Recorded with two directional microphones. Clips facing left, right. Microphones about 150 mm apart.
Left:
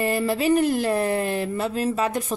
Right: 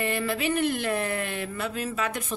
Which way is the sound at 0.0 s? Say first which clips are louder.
Left 5 dB; 35° left (ahead or behind).